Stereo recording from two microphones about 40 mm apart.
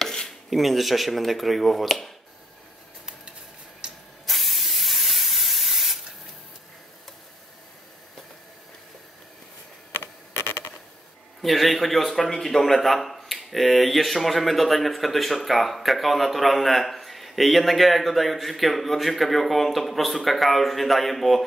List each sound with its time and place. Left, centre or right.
0.0 s dishes: centre
0.5 s a man's voice: centre
4.3 s spray: centre
9.9 s a sound: left
11.4 s a man's voice: centre